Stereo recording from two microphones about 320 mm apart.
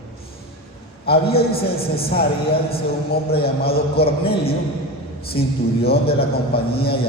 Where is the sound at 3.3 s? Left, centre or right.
Left.